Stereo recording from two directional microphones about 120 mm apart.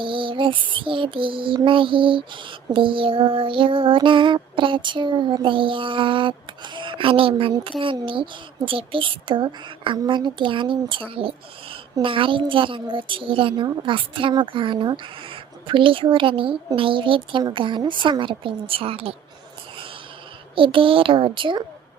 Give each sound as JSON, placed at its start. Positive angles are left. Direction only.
{"t": 0.0, "sound": "music", "side_deg": -45}
{"t": 20.6, "sound": "music", "side_deg": -45}